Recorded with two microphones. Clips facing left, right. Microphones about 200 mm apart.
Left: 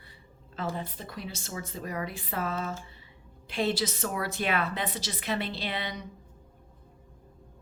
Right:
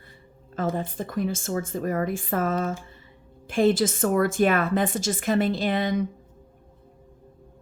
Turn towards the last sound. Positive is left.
turn(degrees=-45)  # may be behind; listen again after turning